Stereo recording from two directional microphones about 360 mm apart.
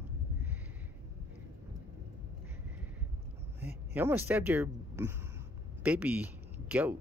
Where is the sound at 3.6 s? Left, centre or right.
Centre.